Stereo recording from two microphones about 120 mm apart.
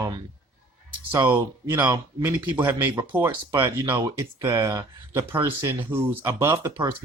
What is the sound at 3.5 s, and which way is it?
Speech, 35° right (ahead or behind).